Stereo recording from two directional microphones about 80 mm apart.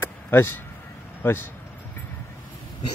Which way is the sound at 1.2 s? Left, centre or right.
Left.